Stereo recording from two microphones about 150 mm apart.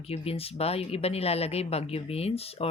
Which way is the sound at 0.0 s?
40° left (ahead or behind).